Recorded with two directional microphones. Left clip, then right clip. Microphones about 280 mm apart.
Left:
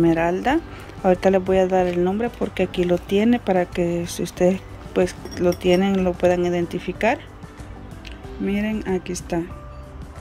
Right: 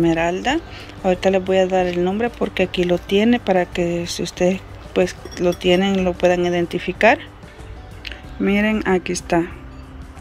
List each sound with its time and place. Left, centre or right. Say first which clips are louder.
0.0 s speech: right 1 dB; centre